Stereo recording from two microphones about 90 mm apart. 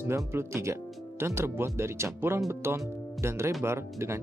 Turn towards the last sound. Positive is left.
turn(degrees=-30)  # may be behind; listen again after turning